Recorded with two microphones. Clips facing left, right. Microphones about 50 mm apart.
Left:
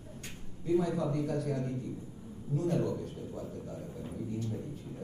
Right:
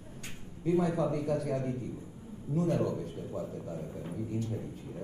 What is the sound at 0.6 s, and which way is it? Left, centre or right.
A man's voice, right.